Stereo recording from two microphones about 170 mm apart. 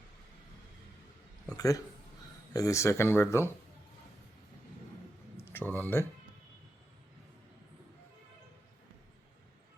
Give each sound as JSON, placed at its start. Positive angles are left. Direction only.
{"t": 1.5, "sound": "speech", "side_deg": 20}
{"t": 5.4, "sound": "speech", "side_deg": 15}